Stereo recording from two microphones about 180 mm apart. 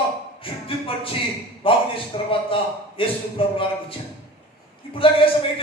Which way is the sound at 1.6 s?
30° left (ahead or behind).